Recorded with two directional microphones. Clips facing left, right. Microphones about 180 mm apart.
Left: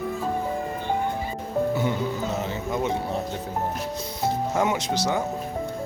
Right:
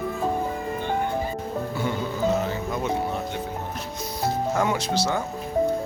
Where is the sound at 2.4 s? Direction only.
20° left (ahead or behind).